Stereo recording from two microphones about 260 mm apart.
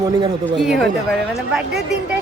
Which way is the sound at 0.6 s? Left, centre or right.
Centre.